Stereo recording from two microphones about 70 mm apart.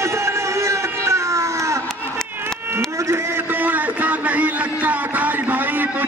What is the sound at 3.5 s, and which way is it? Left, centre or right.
Music, right.